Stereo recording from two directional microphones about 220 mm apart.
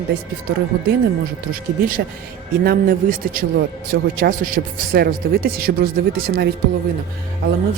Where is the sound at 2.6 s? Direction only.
40° right (ahead or behind).